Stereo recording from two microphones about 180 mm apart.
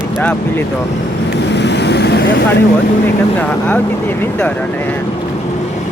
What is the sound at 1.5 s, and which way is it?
Vehicle, 70° left (ahead or behind).